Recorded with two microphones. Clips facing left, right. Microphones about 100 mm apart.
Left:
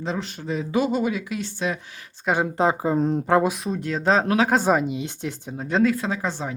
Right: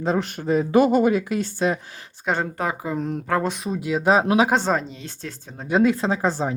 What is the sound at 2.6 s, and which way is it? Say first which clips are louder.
Speech: left 5 dB; 25° left (ahead or behind).